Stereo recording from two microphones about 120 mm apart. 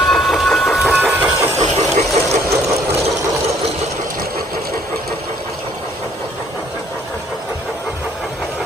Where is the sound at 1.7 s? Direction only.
75° right (ahead or behind).